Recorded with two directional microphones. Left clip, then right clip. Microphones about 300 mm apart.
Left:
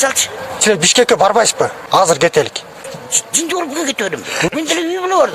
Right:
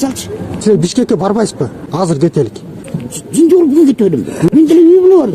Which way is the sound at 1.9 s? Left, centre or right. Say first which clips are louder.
Left 5 dB; left.